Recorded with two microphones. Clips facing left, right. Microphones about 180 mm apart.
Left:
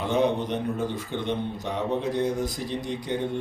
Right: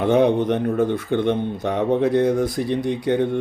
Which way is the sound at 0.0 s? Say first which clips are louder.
Right 7 dB; 55° right (ahead or behind).